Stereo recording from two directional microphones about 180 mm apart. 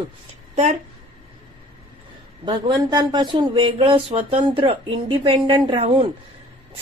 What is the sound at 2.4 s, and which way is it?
Speech, 25° right (ahead or behind).